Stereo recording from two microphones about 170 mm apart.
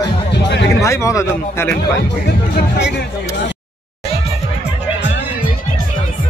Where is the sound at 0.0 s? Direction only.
80° left.